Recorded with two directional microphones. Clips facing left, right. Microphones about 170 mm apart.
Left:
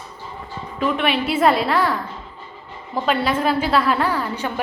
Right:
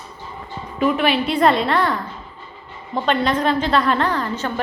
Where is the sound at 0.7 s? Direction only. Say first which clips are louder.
Right 2 dB; centre (ahead or behind).